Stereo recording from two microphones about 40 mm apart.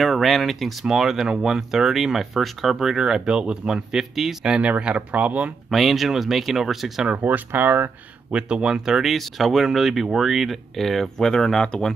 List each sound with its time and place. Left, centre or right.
0.0 s speech: centre
0.8 s speech: centre
3.9 s speech: centre
4.6 s speech: right
5.7 s speech: centre
7.2 s speech: right
8.3 s speech: right
9.0 s speech: centre
10.8 s speech: centre